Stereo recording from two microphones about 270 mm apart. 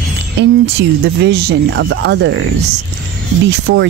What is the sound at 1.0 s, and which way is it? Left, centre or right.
Speech, right.